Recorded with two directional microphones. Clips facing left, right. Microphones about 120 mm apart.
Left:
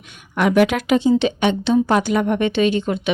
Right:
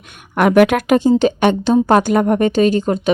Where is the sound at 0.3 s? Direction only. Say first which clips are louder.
Right 4 dB; 55° right (ahead or behind).